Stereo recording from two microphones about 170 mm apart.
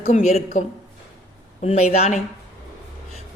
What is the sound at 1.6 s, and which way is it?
Speech, 40° left (ahead or behind).